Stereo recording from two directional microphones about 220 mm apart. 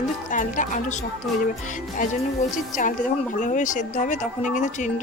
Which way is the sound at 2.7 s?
35° left (ahead or behind).